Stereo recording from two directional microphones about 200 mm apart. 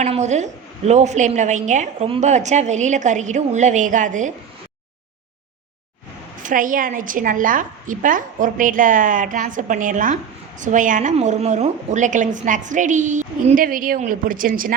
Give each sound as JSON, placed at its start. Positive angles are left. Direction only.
{"t": 0.0, "sound": "a sound", "side_deg": -35}
{"t": 0.9, "sound": "a woman's voice", "side_deg": -35}
{"t": 6.4, "sound": "a woman's voice", "side_deg": -40}